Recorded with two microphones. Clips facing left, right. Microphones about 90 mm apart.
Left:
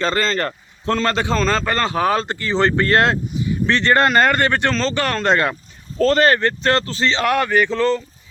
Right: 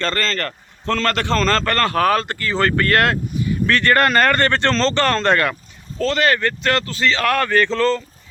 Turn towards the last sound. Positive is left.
turn(degrees=15)  # may be behind; listen again after turning